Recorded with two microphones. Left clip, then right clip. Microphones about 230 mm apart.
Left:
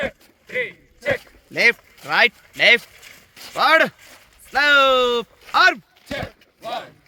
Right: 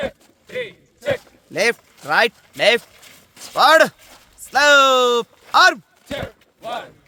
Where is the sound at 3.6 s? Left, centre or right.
Right.